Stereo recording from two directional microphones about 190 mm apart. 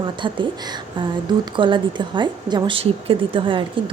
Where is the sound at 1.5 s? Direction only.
25° right (ahead or behind).